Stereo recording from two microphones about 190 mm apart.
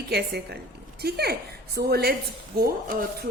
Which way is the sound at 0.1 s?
60° right (ahead or behind).